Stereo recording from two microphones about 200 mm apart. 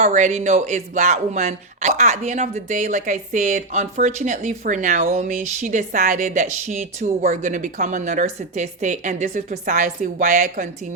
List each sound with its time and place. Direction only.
0.0 s speech: 35° right (ahead or behind)